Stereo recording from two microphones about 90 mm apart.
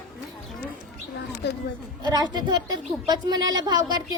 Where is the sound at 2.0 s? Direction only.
50° right (ahead or behind).